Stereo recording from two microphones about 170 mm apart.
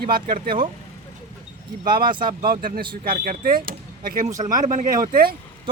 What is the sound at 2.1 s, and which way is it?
Speech, 30° right (ahead or behind).